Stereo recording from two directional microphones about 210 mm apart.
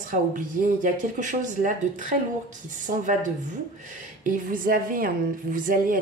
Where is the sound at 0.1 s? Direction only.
40° right (ahead or behind).